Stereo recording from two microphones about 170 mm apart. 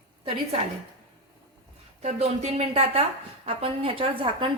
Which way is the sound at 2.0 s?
40° right (ahead or behind).